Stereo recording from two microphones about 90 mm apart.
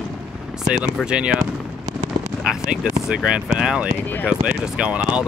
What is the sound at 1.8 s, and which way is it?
Fireworks, 35° right (ahead or behind).